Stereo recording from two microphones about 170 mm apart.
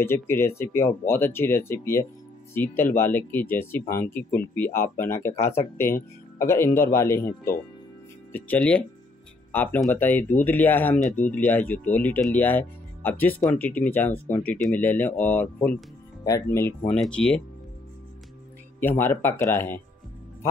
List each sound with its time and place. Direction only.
0.0 s speech: 15° left (ahead or behind)
6.3 s speech: 15° left (ahead or behind)
18.8 s speech: 10° left (ahead or behind)